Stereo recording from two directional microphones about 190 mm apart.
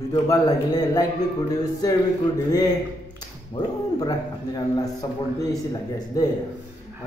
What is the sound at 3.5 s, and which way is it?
A man's voice, 20° left (ahead or behind).